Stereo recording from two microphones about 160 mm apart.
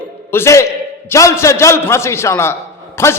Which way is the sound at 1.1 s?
20° left (ahead or behind).